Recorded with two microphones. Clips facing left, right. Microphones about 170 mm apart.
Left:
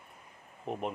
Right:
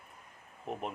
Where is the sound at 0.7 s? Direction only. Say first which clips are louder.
Left 2 dB; centre (ahead or behind).